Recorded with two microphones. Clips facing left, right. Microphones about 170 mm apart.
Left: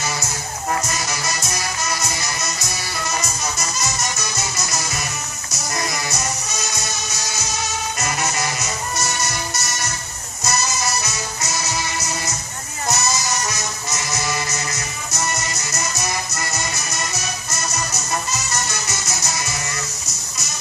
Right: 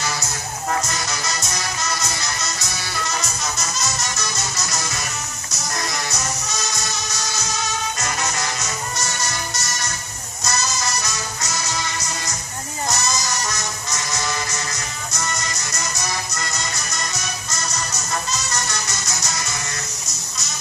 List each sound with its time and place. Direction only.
1.2 s music: centre (ahead or behind)
8.6 s music: 20° left (ahead or behind)
11.1 s music: 5° left (ahead or behind)
12.9 s music: 20° left (ahead or behind)
18.7 s music: 5° left (ahead or behind)